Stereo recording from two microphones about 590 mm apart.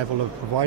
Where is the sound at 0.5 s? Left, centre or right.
Right.